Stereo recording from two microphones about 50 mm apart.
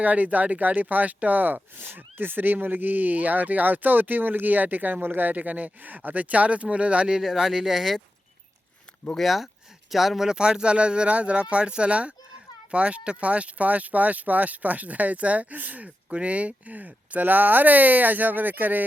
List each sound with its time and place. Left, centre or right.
0.0 s speech: right
7.2 s speech: centre
9.1 s speech: centre; by 18.9 s right